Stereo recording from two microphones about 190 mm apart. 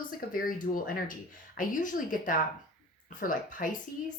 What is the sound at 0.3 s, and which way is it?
Speech, 45° left (ahead or behind).